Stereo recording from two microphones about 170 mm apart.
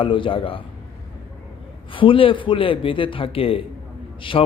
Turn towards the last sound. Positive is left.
turn(degrees=30)  # may be behind; listen again after turning